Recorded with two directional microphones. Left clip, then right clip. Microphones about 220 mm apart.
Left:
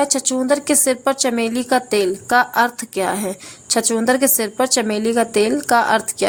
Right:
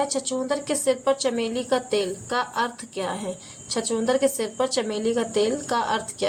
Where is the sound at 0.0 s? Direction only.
55° left (ahead or behind).